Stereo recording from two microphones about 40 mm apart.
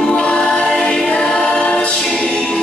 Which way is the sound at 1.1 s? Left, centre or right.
Left.